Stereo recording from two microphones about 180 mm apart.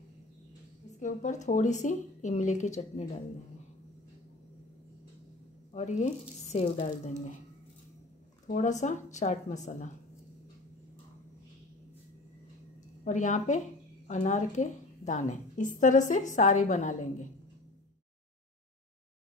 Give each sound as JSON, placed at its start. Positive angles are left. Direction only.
{"t": 0.9, "sound": "a woman's voice", "side_deg": 45}
{"t": 5.7, "sound": "a woman's voice", "side_deg": 40}
{"t": 8.5, "sound": "a woman's voice", "side_deg": 40}
{"t": 13.0, "sound": "a woman's voice", "side_deg": 45}